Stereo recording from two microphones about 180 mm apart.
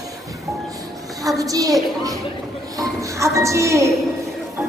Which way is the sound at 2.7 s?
15° right (ahead or behind).